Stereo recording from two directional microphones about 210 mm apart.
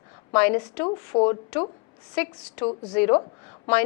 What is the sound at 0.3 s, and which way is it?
Speech, 10° left (ahead or behind).